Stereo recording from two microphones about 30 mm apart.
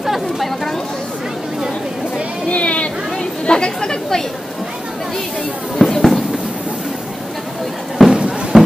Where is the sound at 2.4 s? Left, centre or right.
Left.